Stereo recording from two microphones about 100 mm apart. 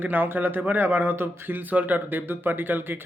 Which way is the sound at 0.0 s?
20° right (ahead or behind).